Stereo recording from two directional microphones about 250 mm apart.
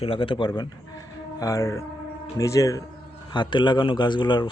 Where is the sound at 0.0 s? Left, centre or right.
Left.